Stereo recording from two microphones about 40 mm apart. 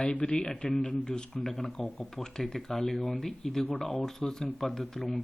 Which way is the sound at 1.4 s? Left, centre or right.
Centre.